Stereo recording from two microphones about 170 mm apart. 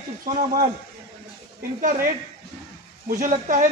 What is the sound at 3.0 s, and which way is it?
Speech, 55° right (ahead or behind).